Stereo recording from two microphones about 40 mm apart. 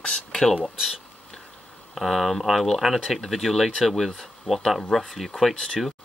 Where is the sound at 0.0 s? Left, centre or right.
Centre.